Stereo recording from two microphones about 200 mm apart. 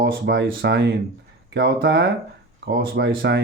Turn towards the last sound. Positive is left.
turn(degrees=-55)  # may be behind; listen again after turning